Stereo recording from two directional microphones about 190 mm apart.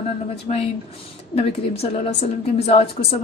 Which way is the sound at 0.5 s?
35° left (ahead or behind).